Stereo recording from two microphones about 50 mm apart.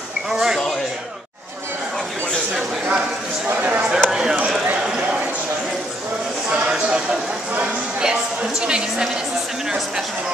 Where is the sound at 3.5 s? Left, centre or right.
Right.